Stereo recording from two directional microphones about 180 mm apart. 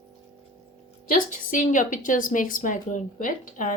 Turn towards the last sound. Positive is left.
turn(degrees=45)  # may be behind; listen again after turning